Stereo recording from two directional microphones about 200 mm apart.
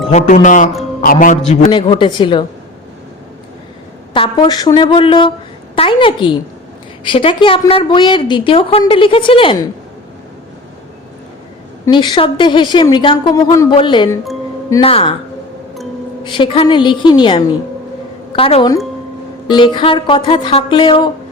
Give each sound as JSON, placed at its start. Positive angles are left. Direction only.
{"t": 0.1, "sound": "a man's voice", "side_deg": 35}
{"t": 1.7, "sound": "a woman's voice", "side_deg": 25}
{"t": 4.1, "sound": "a woman's voice", "side_deg": 25}
{"t": 11.9, "sound": "a woman's voice", "side_deg": 25}
{"t": 16.2, "sound": "a woman's voice", "side_deg": 25}